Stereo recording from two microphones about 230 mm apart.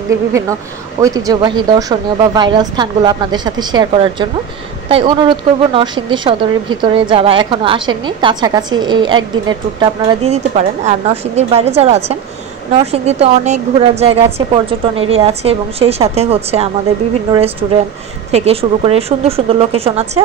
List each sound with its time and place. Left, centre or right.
1.0 s a woman's voice: centre